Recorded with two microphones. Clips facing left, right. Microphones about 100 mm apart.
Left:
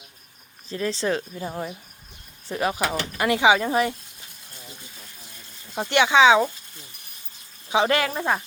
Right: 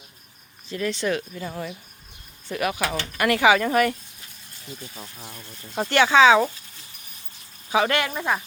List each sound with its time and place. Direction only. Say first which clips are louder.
0.7 s speech: even; 30° left (ahead or behind)
5.9 s speech: right 1 dB; 15° left (ahead or behind)
7.7 s speech: left 1 dB; 30° left (ahead or behind)